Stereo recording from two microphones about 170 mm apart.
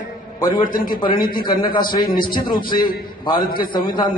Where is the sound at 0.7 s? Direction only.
55° left (ahead or behind).